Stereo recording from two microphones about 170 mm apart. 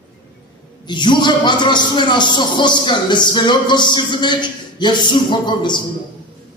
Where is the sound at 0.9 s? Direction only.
25° left (ahead or behind).